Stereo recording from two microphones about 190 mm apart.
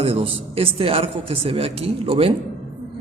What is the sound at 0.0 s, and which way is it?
A man's voice, 30° right (ahead or behind).